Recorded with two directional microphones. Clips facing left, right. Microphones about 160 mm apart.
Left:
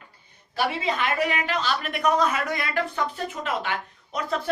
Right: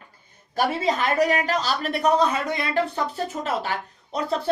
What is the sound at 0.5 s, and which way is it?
A woman's voice, 40° right (ahead or behind).